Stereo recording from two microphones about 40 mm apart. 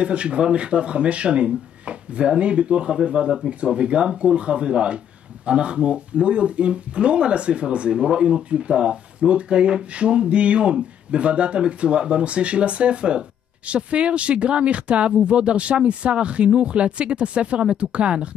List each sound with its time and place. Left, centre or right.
0.0 s speech: right